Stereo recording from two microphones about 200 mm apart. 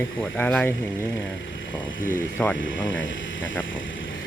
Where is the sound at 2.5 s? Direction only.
70° left (ahead or behind).